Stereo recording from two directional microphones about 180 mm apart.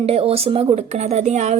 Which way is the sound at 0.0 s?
35° right (ahead or behind).